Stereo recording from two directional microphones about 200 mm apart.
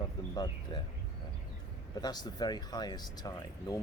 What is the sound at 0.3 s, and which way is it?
Speech, 25° left (ahead or behind).